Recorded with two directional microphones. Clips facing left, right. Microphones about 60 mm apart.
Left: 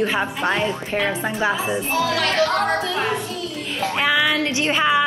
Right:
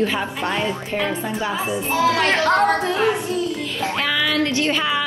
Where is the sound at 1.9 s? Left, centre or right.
Right.